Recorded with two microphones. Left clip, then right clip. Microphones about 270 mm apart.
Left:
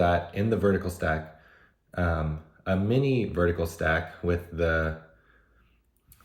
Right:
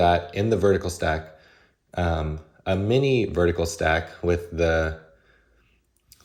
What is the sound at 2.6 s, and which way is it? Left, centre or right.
Speech, centre.